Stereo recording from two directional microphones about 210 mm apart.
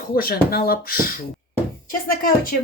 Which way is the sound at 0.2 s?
45° left (ahead or behind).